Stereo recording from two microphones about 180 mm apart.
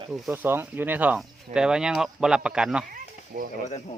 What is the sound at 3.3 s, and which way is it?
Speech, 55° right (ahead or behind).